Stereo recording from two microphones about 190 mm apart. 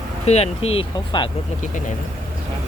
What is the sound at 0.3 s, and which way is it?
Speech, 35° left (ahead or behind).